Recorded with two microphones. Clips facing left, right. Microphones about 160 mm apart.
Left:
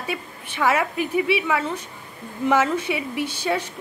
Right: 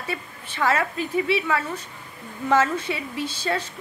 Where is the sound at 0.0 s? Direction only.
15° left (ahead or behind).